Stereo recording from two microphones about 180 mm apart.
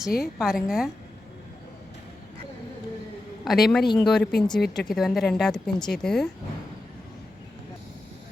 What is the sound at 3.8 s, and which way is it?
Speech, 25° left (ahead or behind).